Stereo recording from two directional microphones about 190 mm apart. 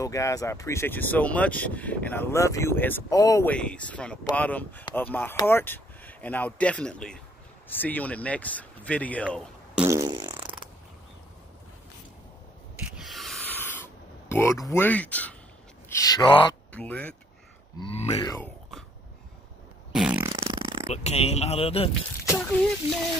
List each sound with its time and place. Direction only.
0.0 s speech: 15° left (ahead or behind)
9.8 s fart: 15° right (ahead or behind)
12.9 s snort: centre (ahead or behind)
14.3 s speech: 15° left (ahead or behind)
16.0 s a man's voice: 20° left (ahead or behind)
16.7 s speech: 10° left (ahead or behind)
17.7 s a man's voice: 30° left (ahead or behind)
19.9 s fart: 5° right (ahead or behind)
20.2 s a sound: 25° right (ahead or behind)
20.8 s speech: 35° left (ahead or behind)